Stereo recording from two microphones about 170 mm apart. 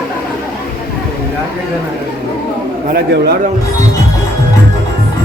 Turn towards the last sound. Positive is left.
turn(degrees=-65)  # may be behind; listen again after turning